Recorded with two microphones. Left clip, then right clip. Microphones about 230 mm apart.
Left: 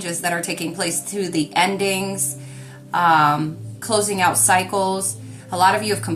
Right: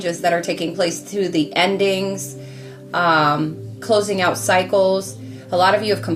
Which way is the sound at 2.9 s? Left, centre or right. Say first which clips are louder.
Left 1 dB; centre.